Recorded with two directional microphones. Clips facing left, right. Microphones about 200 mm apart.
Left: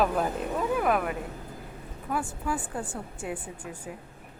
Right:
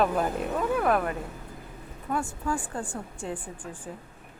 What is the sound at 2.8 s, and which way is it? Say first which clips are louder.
Speech: right 1 dB; 20° left (ahead or behind).